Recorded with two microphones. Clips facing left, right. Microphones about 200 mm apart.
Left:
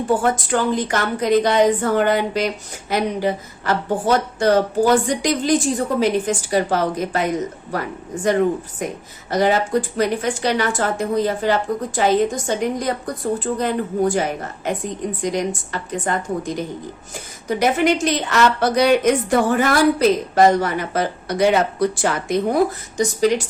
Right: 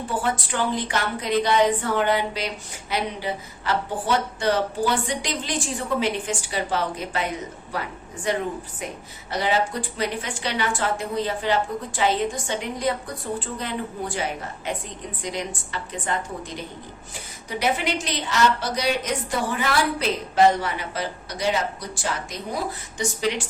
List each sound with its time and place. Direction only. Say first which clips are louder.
0.1 s a woman's voice: left 8 dB; 45° left (ahead or behind)